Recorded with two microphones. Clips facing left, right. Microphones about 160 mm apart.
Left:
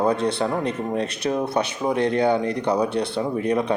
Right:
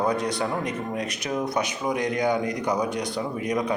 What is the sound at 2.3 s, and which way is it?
Speech, 10° right (ahead or behind).